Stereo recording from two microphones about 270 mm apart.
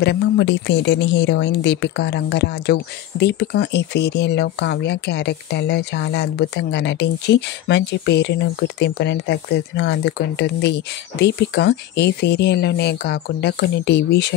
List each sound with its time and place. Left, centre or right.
0.0 s a woman's voice: left